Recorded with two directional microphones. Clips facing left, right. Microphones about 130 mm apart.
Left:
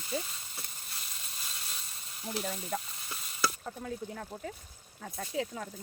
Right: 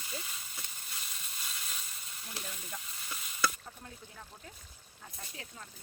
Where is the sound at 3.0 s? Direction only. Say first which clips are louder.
Right 4 dB; 35° left (ahead or behind).